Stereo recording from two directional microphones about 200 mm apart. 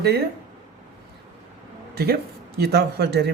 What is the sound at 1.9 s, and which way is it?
Speech, 50° right (ahead or behind).